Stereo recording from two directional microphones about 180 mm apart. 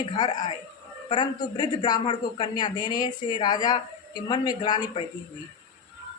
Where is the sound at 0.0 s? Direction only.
25° left (ahead or behind).